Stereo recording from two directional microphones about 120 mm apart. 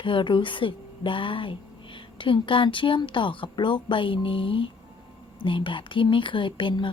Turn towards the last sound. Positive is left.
turn(degrees=45)  # may be behind; listen again after turning